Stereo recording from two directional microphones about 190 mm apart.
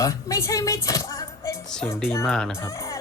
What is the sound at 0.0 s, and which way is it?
Speech, 15° left (ahead or behind).